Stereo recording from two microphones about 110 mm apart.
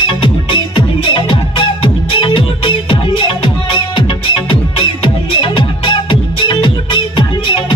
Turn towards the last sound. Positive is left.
turn(degrees=45)  # may be behind; listen again after turning